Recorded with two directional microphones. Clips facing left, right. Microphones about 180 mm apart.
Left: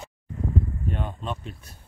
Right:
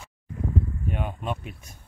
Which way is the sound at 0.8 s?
10° right (ahead or behind).